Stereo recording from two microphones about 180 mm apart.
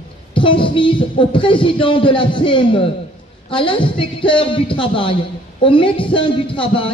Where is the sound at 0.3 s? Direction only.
25° left (ahead or behind).